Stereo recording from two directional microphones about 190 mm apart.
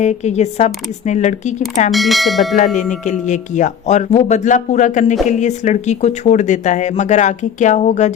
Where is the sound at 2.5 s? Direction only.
40° left (ahead or behind).